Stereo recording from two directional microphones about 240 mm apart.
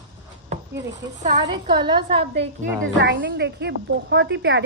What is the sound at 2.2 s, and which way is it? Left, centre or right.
A woman's voice, right.